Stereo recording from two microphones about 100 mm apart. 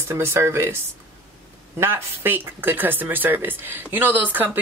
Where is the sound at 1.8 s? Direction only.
25° right (ahead or behind).